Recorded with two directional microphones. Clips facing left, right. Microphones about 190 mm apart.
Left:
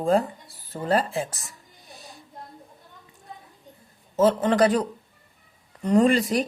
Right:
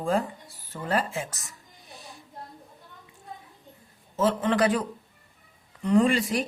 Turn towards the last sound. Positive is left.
turn(degrees=40)  # may be behind; listen again after turning